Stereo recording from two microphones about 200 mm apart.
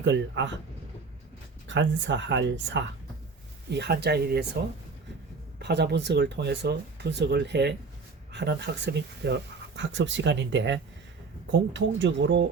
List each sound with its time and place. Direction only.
0.0 s speech: 65° right (ahead or behind)
1.6 s speech: 65° right (ahead or behind)
5.5 s speech: 55° right (ahead or behind)